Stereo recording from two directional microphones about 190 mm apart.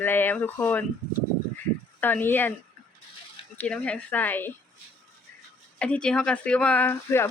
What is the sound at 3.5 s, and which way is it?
Speech, 5° left (ahead or behind).